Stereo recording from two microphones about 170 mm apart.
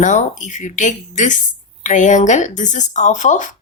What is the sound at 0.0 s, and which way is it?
Speech, 45° left (ahead or behind).